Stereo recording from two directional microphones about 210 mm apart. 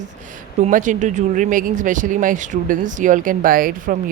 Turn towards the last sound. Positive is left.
turn(degrees=-45)  # may be behind; listen again after turning